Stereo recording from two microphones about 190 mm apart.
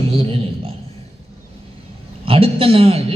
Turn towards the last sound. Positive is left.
turn(degrees=-30)  # may be behind; listen again after turning